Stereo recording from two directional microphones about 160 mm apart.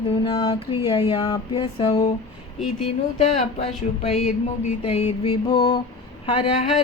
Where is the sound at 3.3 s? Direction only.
40° left (ahead or behind).